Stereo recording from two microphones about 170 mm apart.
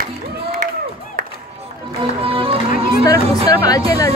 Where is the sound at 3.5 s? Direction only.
20° left (ahead or behind).